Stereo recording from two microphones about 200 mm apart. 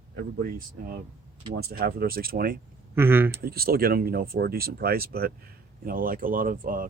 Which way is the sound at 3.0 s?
10° right (ahead or behind).